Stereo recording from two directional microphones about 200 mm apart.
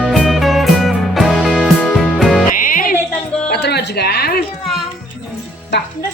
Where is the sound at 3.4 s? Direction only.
55° left (ahead or behind).